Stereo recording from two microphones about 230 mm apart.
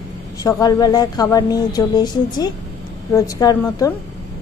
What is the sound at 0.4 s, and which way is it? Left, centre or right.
Speech, centre.